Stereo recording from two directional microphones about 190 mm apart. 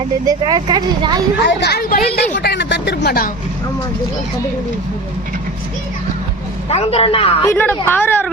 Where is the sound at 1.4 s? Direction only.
60° left (ahead or behind).